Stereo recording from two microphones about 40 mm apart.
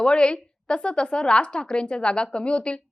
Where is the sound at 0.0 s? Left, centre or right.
Left.